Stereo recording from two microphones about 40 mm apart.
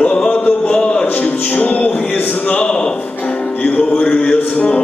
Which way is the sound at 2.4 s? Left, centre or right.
Left.